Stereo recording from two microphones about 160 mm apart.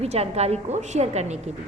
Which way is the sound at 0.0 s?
40° right (ahead or behind).